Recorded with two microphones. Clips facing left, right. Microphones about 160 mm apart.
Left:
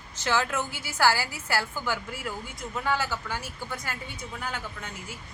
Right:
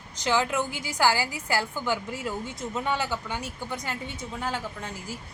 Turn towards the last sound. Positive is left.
turn(degrees=-30)  # may be behind; listen again after turning